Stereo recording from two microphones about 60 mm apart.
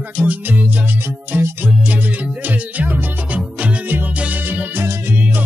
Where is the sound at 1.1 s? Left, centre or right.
Right.